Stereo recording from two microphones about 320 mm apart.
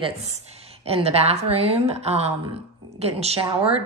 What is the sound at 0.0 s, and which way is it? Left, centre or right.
A woman's voice, centre.